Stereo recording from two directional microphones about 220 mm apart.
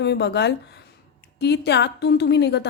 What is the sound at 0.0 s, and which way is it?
A woman's voice, 50° left (ahead or behind).